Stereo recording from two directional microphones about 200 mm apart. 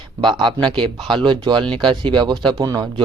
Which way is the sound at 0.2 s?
25° right (ahead or behind).